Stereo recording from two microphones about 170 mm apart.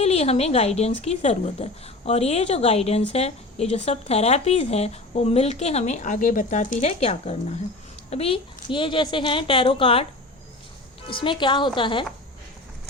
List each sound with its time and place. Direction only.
0.0 s speech: 40° left (ahead or behind)
11.1 s speech: 30° left (ahead or behind)